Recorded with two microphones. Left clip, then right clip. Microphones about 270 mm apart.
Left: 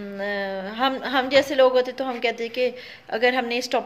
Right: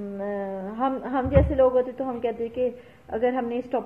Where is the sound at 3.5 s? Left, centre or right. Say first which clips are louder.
Left 4 dB; left.